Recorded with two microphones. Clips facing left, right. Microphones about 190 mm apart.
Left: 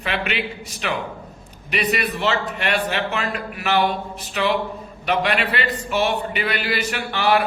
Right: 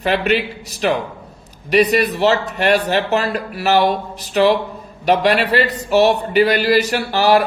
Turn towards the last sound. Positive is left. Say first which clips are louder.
# right 5 dB
turn(degrees=-40)  # may be behind; listen again after turning